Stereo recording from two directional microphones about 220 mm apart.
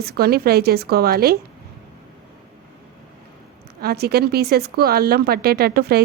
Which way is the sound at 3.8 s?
45° right (ahead or behind).